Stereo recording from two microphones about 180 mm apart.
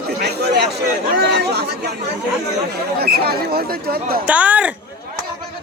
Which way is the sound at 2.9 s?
60° right (ahead or behind).